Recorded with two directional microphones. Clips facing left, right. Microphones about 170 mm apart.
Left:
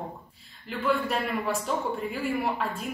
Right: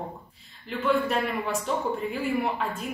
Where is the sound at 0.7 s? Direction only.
Centre (ahead or behind).